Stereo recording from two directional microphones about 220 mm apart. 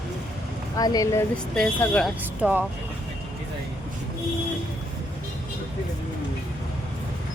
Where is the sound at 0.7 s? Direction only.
15° left (ahead or behind).